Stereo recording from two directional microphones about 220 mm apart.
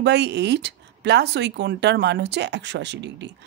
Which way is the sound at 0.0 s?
50° right (ahead or behind).